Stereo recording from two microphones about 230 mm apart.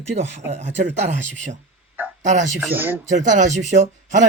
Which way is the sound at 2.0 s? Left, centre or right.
Centre.